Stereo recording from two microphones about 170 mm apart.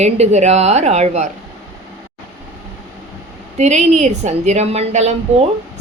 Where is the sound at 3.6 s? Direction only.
40° right (ahead or behind).